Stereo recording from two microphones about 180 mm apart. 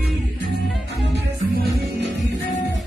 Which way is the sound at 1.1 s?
65° right (ahead or behind).